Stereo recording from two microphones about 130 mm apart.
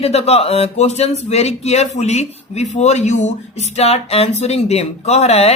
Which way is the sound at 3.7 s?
55° left (ahead or behind).